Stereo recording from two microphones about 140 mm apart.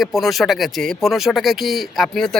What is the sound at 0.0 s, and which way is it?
Speech, centre (ahead or behind).